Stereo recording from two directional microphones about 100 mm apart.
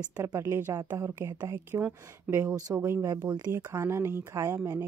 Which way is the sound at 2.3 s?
10° right (ahead or behind).